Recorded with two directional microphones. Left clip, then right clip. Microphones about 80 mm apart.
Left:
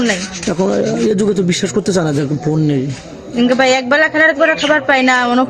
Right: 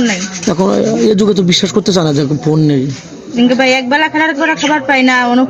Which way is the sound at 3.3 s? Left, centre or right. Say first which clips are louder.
Right 2 dB; left.